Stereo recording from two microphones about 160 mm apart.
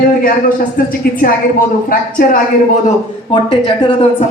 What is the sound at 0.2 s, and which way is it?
A woman's voice, 60° left (ahead or behind).